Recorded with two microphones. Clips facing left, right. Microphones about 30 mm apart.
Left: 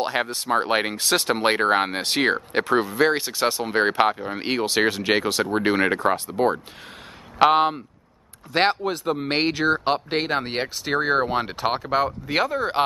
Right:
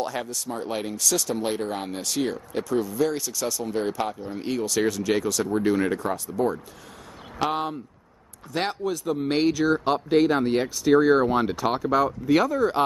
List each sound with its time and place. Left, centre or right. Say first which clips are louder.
0.0 s speech: left 5 dB; left